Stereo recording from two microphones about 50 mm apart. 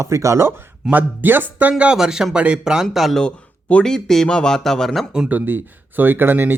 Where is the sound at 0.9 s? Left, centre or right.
Right.